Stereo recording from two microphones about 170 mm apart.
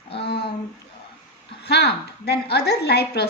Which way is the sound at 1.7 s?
75° left (ahead or behind).